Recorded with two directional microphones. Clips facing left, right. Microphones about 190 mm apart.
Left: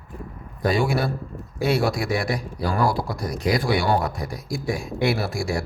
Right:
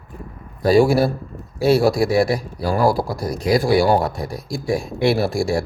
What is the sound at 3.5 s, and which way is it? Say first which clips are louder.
Speech: right 7 dB; 30° right (ahead or behind).